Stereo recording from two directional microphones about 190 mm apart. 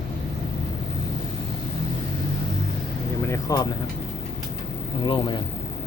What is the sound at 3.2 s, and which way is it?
Vehicle, 15° left (ahead or behind).